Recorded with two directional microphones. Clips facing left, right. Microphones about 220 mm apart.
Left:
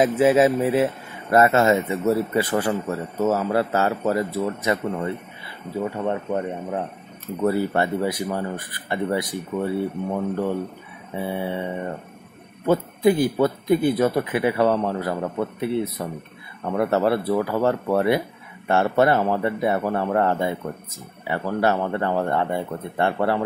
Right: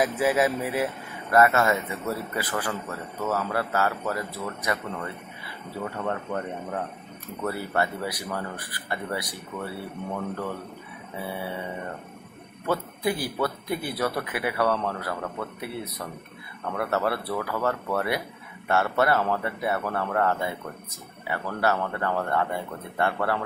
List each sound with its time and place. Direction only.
0.0 s a man's voice: 25° left (ahead or behind)
12.6 s a man's voice: 20° left (ahead or behind)